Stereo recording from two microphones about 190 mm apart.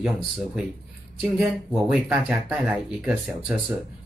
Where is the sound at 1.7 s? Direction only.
5° right (ahead or behind).